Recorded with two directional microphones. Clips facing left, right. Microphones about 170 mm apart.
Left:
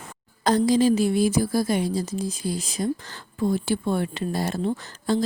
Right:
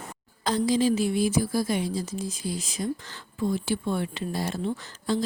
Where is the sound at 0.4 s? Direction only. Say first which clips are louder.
Left 4 dB; 40° left (ahead or behind).